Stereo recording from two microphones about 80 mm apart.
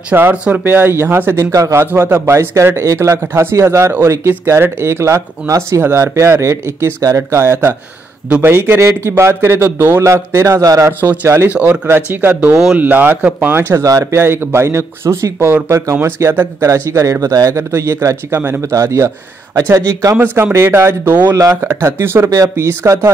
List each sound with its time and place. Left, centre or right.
0.1 s speech: right
1.9 s speech: right
10.9 s speech: right